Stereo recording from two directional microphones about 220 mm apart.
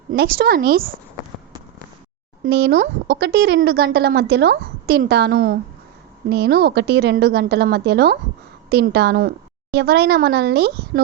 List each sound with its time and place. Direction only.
0.1 s speech: 45° right (ahead or behind)
2.4 s speech: 45° right (ahead or behind)